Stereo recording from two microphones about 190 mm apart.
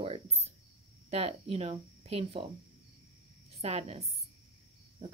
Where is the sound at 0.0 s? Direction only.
30° right (ahead or behind).